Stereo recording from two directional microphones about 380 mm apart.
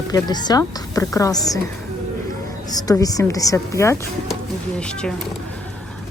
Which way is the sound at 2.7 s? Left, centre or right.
Centre.